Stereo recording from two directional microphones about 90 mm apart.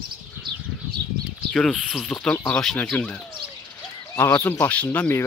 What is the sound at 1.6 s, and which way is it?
Speech, 5° left (ahead or behind).